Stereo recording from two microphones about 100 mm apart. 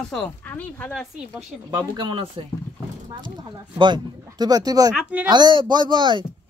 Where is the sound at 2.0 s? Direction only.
55° right (ahead or behind).